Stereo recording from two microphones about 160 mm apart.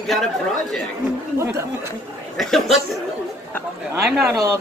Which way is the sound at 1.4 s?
15° right (ahead or behind).